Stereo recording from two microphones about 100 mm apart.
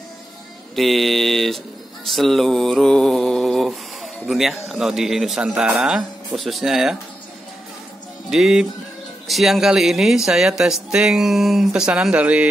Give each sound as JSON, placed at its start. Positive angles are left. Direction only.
{"t": 0.7, "sound": "mantra", "side_deg": 0}
{"t": 8.3, "sound": "mantra", "side_deg": -5}